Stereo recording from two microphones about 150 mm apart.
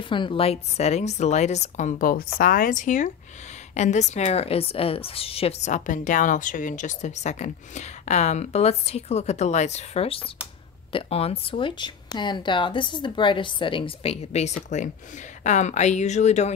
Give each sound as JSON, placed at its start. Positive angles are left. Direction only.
{"t": 0.0, "sound": "a woman's voice", "side_deg": 35}